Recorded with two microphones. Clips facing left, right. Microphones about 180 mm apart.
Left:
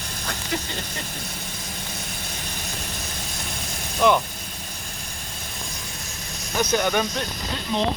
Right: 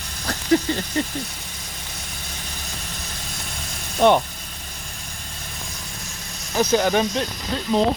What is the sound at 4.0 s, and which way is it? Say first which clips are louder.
Speech: right 3 dB; 35° right (ahead or behind).